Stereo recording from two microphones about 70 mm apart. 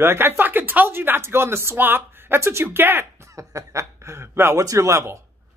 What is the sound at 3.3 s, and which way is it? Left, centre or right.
A man's voice, right.